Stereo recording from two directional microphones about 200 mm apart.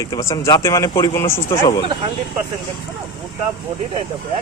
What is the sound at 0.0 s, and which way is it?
Speech, 15° left (ahead or behind).